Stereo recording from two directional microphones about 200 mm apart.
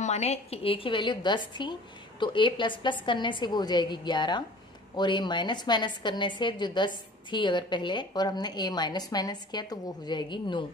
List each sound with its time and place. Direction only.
0.0 s a woman's voice: 35° left (ahead or behind)